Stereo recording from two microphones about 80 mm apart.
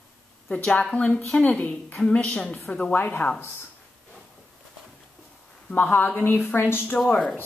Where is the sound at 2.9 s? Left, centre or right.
Left.